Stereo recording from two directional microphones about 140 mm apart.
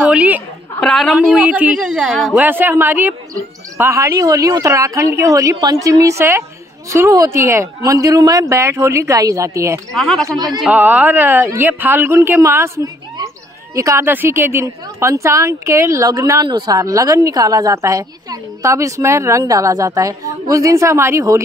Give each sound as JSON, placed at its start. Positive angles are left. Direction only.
{"t": 0.0, "sound": "a sound", "side_deg": -10}
{"t": 0.7, "sound": "a woman's voice", "side_deg": 5}
{"t": 2.4, "sound": "a woman's voice", "side_deg": -15}
{"t": 9.9, "sound": "a woman's voice", "side_deg": 5}
{"t": 10.2, "sound": "a woman's voice", "side_deg": -30}
{"t": 10.6, "sound": "a woman's voice", "side_deg": -10}